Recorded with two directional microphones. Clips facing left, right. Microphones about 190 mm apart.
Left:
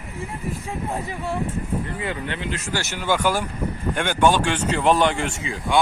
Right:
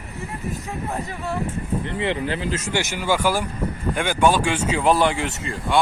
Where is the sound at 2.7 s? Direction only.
15° right (ahead or behind).